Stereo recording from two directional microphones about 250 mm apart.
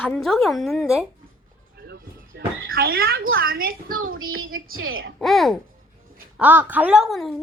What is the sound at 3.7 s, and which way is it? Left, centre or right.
A woman's voice, right.